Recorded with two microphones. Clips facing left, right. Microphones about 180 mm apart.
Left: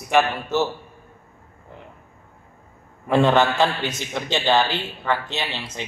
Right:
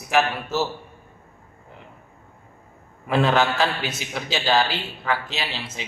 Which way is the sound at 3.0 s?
5° right (ahead or behind).